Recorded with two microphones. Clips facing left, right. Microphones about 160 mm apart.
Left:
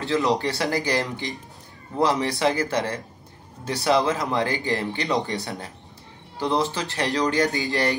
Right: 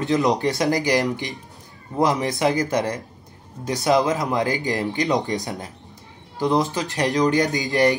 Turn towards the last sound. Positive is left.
turn(degrees=-15)  # may be behind; listen again after turning